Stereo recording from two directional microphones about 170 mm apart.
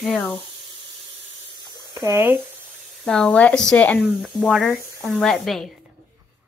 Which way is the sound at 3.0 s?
5° left (ahead or behind).